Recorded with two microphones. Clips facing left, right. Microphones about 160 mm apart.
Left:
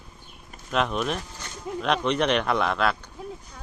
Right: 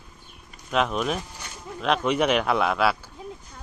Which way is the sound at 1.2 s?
10° right (ahead or behind).